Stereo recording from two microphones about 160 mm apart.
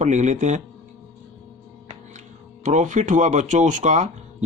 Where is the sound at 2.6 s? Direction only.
50° right (ahead or behind).